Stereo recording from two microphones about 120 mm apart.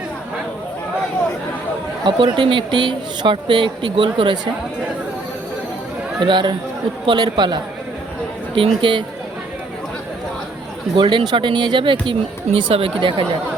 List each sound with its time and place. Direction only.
2.0 s speech: 40° right (ahead or behind)
6.1 s speech: 40° right (ahead or behind)
10.9 s speech: 40° right (ahead or behind)